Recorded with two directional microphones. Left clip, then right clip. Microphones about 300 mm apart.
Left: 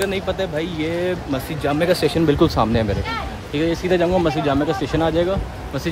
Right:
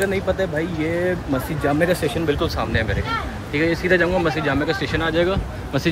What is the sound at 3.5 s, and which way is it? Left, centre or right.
Speech, centre.